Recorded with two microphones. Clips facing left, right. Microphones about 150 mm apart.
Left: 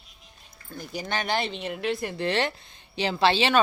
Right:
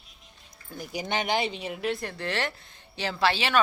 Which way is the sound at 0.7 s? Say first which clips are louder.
Right 1 dB; 15° right (ahead or behind).